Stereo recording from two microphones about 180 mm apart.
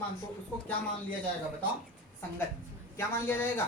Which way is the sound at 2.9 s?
10° left (ahead or behind).